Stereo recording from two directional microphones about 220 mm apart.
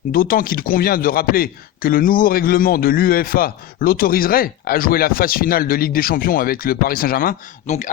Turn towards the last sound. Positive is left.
turn(degrees=35)  # may be behind; listen again after turning